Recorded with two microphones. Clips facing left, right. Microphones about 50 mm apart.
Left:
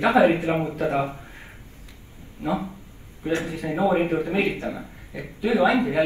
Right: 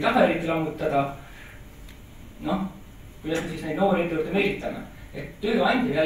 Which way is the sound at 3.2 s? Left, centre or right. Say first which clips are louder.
Left 2 dB; left.